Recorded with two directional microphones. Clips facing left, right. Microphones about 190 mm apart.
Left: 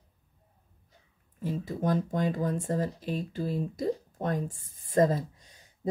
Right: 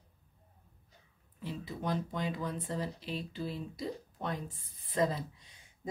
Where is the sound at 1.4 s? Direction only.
45° left (ahead or behind).